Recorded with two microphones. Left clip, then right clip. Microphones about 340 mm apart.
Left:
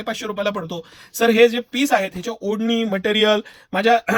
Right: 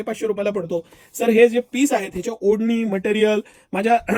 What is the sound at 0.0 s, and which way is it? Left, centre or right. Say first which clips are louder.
Speech: right 1 dB; left.